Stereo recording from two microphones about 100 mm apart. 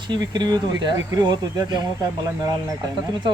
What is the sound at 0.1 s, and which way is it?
Speech, 45° right (ahead or behind).